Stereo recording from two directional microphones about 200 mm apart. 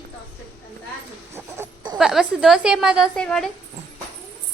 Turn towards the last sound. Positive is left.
turn(degrees=5)  # may be behind; listen again after turning